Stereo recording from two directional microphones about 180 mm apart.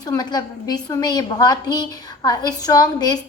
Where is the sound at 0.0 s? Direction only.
20° left (ahead or behind).